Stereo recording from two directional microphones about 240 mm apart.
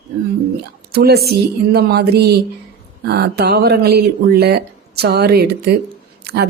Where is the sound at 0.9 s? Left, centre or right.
Right.